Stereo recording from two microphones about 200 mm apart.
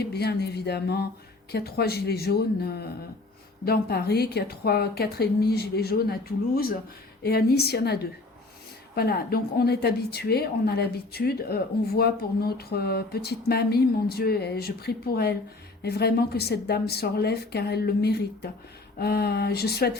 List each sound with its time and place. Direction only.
0.0 s a woman's voice: 55° left (ahead or behind)
9.0 s a woman's voice: 50° left (ahead or behind)